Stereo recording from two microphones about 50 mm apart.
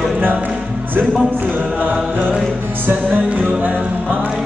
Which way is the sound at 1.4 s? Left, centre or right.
Right.